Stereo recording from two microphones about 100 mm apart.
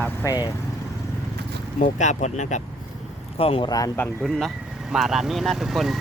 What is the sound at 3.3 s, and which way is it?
Speech, 75° left (ahead or behind).